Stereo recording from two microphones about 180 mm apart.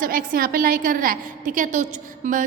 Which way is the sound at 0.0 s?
50° right (ahead or behind).